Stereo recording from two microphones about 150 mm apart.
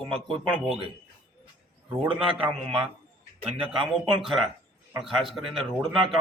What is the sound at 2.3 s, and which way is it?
Speech, 40° right (ahead or behind).